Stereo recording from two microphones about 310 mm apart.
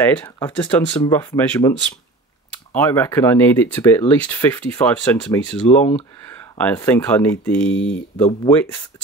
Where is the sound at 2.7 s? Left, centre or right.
Centre.